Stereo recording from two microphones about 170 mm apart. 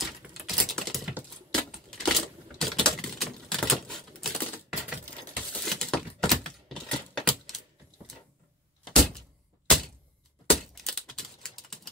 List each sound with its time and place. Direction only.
0.0 s typing: centre (ahead or behind)
1.5 s typewriter: centre (ahead or behind)
5.3 s a sound: 5° left (ahead or behind)
10.4 s typing: 5° left (ahead or behind)